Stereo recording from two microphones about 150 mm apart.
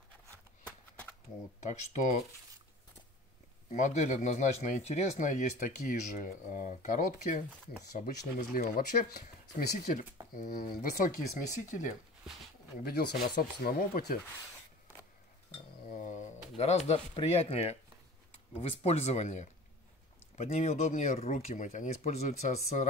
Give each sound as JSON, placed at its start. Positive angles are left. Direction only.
{"t": 1.7, "sound": "speech", "side_deg": 55}
{"t": 3.7, "sound": "speech", "side_deg": 55}
{"t": 10.3, "sound": "speech", "side_deg": 70}
{"t": 12.8, "sound": "speech", "side_deg": 90}
{"t": 15.9, "sound": "speech", "side_deg": 55}